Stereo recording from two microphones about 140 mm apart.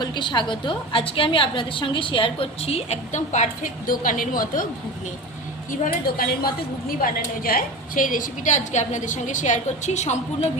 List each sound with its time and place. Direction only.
0.0 s a woman's voice: 35° left (ahead or behind); by 4.7 s 75° left (ahead or behind)
5.8 s a woman's voice: 90° left; by 10.5 s 55° left (ahead or behind)